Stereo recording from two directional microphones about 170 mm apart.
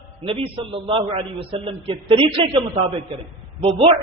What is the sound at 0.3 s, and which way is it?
A man's voice, 30° right (ahead or behind).